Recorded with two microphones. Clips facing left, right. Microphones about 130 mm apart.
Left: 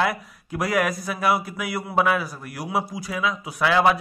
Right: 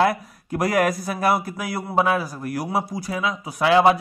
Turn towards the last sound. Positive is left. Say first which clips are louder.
# right 3 dB
turn(degrees=-30)  # may be behind; listen again after turning